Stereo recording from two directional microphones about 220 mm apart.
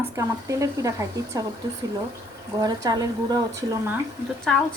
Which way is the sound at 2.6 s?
15° right (ahead or behind).